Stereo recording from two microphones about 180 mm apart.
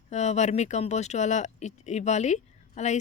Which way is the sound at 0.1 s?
40° left (ahead or behind).